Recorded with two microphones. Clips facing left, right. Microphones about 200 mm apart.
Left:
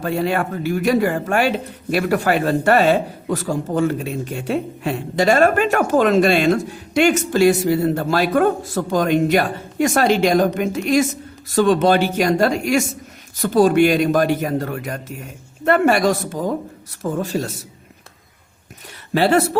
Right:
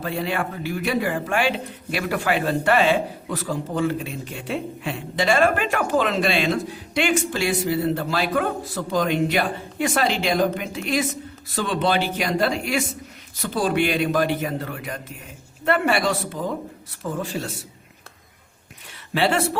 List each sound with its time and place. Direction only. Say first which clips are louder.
0.0 s a man's voice: left 5 dB; 45° left (ahead or behind)
19.1 s a man's voice: left 5 dB; 40° left (ahead or behind)